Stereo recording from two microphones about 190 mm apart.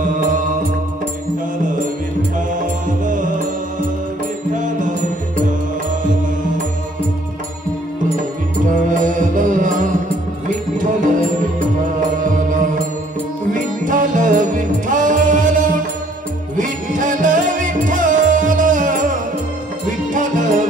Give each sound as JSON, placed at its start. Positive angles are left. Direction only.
{"t": 0.0, "sound": "music", "side_deg": -45}
{"t": 2.6, "sound": "music", "side_deg": -45}
{"t": 4.6, "sound": "music", "side_deg": -45}
{"t": 8.9, "sound": "music", "side_deg": -45}
{"t": 12.2, "sound": "music", "side_deg": -45}